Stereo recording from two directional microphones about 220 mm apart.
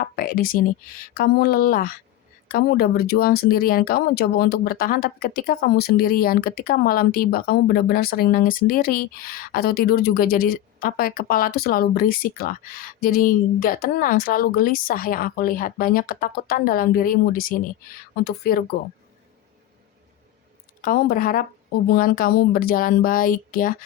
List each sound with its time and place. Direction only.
0.0 s speech: 40° left (ahead or behind)
20.8 s speech: 40° left (ahead or behind)